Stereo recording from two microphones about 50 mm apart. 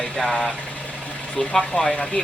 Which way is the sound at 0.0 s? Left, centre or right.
Centre.